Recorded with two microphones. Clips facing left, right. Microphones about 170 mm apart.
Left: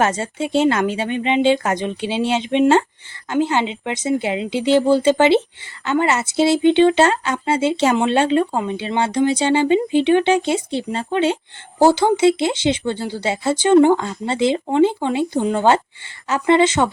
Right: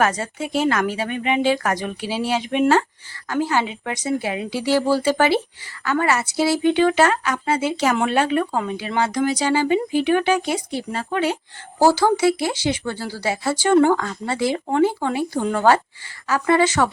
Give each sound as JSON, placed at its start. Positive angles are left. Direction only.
{"t": 0.0, "sound": "speech", "side_deg": 25}